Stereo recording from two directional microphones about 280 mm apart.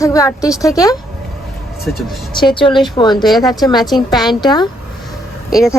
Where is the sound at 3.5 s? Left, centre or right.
Centre.